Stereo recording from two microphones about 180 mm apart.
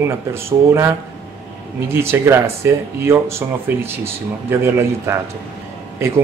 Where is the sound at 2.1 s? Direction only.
15° right (ahead or behind).